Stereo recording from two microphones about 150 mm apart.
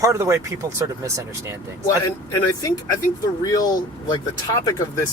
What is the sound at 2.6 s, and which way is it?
Speech, 25° left (ahead or behind).